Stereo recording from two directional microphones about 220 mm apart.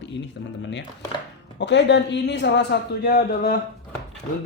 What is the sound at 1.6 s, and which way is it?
Speech, 55° left (ahead or behind).